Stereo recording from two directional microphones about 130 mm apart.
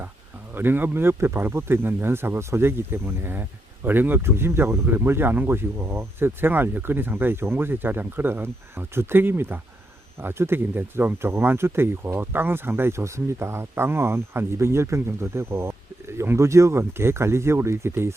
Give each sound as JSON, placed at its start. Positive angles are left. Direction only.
{"t": 0.5, "sound": "speech", "side_deg": -15}